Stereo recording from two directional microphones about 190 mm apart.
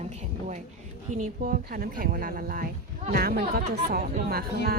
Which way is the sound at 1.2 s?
45° right (ahead or behind).